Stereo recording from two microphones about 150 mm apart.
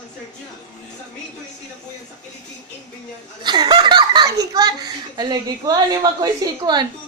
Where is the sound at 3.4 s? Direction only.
30° right (ahead or behind).